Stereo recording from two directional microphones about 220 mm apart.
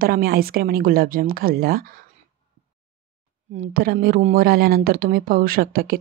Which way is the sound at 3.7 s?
45° right (ahead or behind).